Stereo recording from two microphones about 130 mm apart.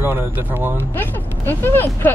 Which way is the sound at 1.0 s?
15° left (ahead or behind).